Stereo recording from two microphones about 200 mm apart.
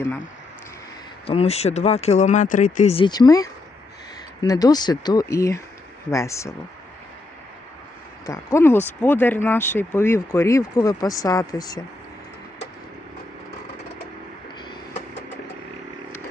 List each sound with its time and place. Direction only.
1.3 s speech: 30° left (ahead or behind); by 6.5 s 15° left (ahead or behind)
8.3 s speech: 15° left (ahead or behind)